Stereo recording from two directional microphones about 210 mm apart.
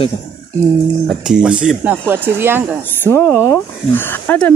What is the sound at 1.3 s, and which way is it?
Speech, 5° right (ahead or behind).